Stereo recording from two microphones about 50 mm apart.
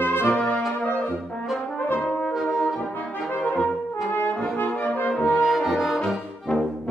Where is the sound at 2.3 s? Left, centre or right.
Centre.